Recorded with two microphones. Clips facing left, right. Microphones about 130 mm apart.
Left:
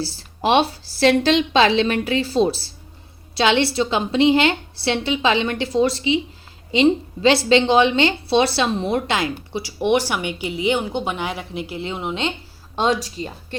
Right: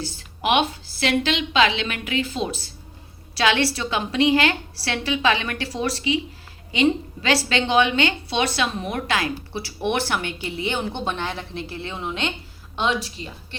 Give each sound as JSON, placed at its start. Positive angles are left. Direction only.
{"t": 0.0, "sound": "a woman's voice", "side_deg": 30}
{"t": 12.7, "sound": "a woman's voice", "side_deg": 40}